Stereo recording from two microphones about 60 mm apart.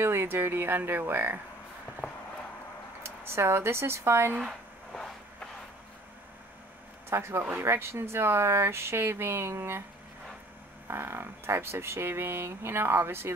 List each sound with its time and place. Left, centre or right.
0.0 s speech: right
3.0 s speech: right
4.9 s a sound: centre
7.1 s speech: right
10.9 s speech: right